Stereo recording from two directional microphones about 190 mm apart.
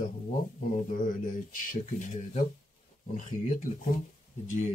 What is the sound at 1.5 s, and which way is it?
Speech, 40° left (ahead or behind).